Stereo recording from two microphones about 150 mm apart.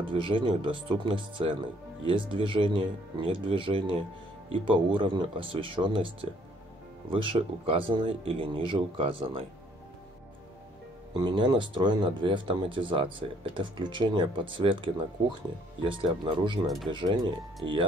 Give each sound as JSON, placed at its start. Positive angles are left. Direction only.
{"t": 0.0, "sound": "speech", "side_deg": -35}
{"t": 11.1, "sound": "speech", "side_deg": -30}
{"t": 16.6, "sound": "speech", "side_deg": 0}
{"t": 16.9, "sound": "speech", "side_deg": -30}